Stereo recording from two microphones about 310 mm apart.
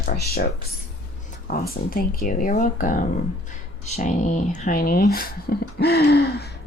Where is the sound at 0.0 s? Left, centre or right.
Left.